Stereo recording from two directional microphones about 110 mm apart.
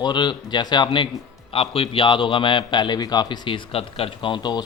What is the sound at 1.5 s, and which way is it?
A man's voice, 60° left (ahead or behind).